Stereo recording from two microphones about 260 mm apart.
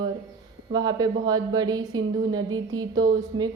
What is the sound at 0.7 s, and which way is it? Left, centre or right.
A woman's voice, centre.